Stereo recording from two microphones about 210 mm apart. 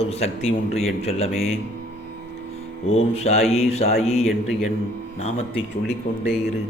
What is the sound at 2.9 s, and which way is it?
A man's voice, 30° left (ahead or behind).